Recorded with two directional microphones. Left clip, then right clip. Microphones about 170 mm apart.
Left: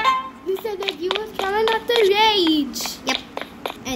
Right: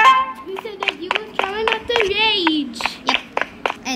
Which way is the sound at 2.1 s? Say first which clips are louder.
Even; 50° left (ahead or behind).